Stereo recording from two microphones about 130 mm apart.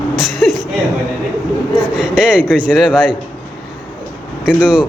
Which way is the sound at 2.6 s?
10° right (ahead or behind).